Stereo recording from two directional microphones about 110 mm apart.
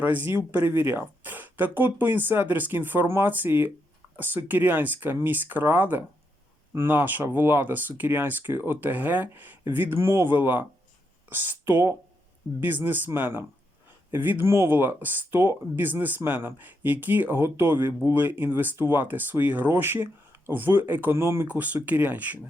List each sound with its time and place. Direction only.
0.0 s speech: 15° right (ahead or behind)